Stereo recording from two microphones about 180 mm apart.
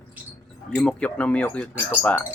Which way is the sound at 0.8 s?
5° left (ahead or behind).